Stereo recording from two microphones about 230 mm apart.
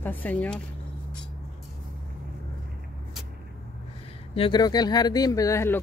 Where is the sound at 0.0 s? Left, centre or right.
Centre.